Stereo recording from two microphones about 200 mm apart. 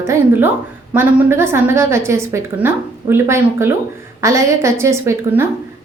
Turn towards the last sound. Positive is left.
turn(degrees=-15)  # may be behind; listen again after turning